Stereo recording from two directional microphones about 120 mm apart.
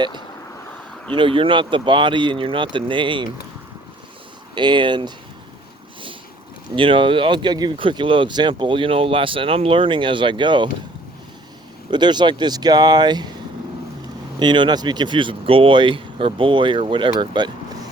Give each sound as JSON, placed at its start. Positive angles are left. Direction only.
{"t": 1.1, "sound": "speech", "side_deg": -45}
{"t": 4.5, "sound": "speech", "side_deg": -40}
{"t": 6.7, "sound": "speech", "side_deg": -45}
{"t": 11.9, "sound": "speech", "side_deg": -40}
{"t": 14.3, "sound": "speech", "side_deg": -40}